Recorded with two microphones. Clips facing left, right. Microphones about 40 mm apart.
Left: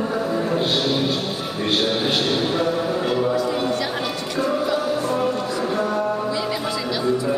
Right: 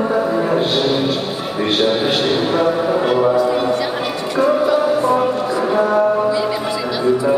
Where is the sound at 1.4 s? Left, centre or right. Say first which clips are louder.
Right 6 dB; centre.